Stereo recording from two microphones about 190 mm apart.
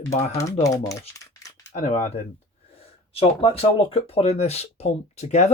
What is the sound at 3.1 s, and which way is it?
Speech, 30° left (ahead or behind).